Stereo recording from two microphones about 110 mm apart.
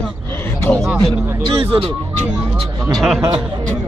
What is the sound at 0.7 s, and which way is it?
Speech, 30° right (ahead or behind).